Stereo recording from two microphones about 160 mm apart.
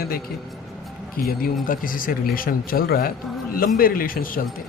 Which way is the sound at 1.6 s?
60° left (ahead or behind).